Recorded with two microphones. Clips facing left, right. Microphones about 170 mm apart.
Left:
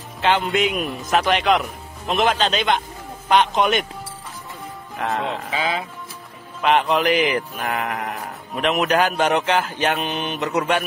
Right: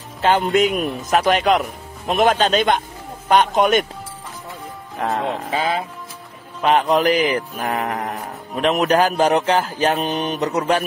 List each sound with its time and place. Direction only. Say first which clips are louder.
0.2 s speech: right 3 dB; 40° right (ahead or behind)
1.1 s mantra: right 2 dB; 45° right (ahead or behind)
5.0 s mantra: right 2 dB; 40° right (ahead or behind)
6.6 s speech: right 2 dB; 40° right (ahead or behind)